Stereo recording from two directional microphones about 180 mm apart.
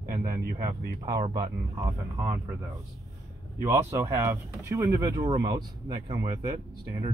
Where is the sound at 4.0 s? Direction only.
15° right (ahead or behind).